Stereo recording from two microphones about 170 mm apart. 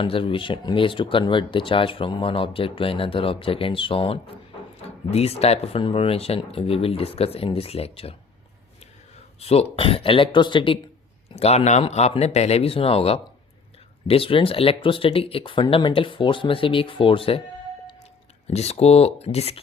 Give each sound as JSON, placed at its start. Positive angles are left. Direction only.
{"t": 0.0, "sound": "speech", "side_deg": 30}
{"t": 9.4, "sound": "speech", "side_deg": 35}
{"t": 18.4, "sound": "speech", "side_deg": 40}